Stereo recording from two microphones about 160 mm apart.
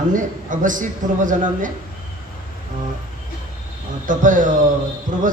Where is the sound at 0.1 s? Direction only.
55° right (ahead or behind).